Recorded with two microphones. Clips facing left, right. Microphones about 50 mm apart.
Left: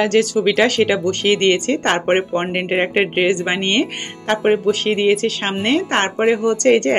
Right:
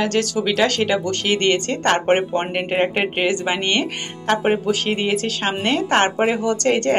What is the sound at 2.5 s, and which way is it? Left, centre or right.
Speech, centre.